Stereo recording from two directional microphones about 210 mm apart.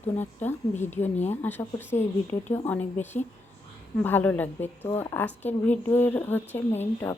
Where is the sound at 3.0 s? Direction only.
35° left (ahead or behind).